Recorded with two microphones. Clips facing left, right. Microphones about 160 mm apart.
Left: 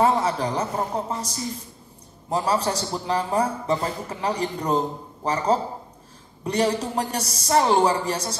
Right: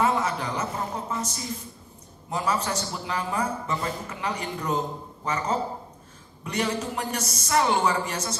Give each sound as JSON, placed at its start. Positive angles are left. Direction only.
{"t": 0.0, "sound": "a man's voice", "side_deg": 35}